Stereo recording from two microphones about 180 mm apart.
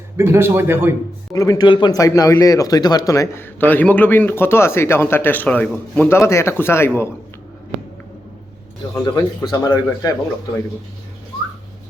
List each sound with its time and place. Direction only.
0.2 s a man's voice: 15° right (ahead or behind)
1.3 s a man's voice: 20° left (ahead or behind)
9.1 s speech: 20° left (ahead or behind)